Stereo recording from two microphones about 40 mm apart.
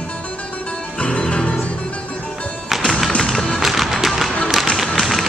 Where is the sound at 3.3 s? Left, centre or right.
Centre.